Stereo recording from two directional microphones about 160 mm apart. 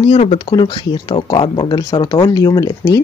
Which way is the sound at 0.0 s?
35° left (ahead or behind).